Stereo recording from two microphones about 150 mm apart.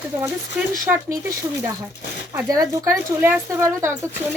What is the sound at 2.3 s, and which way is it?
A woman's voice, 25° right (ahead or behind).